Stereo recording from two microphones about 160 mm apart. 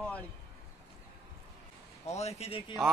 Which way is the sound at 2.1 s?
40° left (ahead or behind).